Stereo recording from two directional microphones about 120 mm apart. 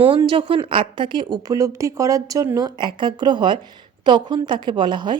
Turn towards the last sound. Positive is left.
turn(degrees=-40)  # may be behind; listen again after turning